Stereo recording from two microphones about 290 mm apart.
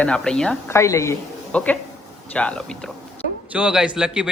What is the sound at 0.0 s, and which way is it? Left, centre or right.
A man's voice, centre.